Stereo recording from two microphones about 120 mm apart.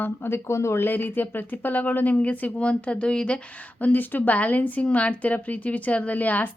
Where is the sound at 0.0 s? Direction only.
20° left (ahead or behind).